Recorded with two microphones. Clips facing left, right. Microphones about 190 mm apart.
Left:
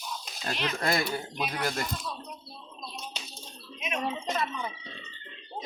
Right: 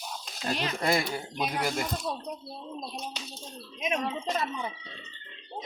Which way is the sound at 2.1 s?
25° right (ahead or behind).